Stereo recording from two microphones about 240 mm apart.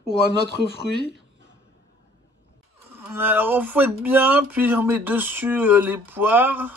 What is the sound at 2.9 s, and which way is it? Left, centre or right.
Speech, centre.